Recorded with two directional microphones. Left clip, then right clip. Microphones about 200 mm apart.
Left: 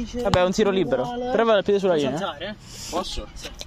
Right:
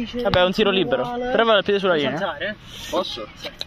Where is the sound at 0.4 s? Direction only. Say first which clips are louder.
Right 3 dB; 10° left (ahead or behind).